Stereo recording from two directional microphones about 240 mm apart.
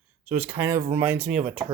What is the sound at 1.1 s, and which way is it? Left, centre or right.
Speech, right.